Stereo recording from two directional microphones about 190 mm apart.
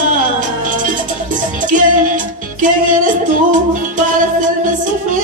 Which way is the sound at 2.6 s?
45° right (ahead or behind).